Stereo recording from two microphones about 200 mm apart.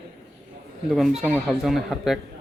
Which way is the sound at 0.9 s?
Centre (ahead or behind).